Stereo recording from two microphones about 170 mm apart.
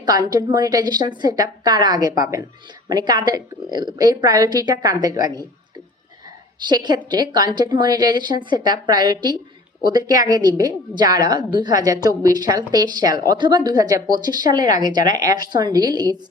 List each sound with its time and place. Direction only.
0.0 s a woman's voice: 25° right (ahead or behind)
6.7 s a woman's voice: 25° right (ahead or behind)